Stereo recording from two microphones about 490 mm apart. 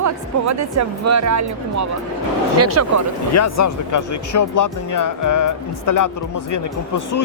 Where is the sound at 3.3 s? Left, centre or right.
Left.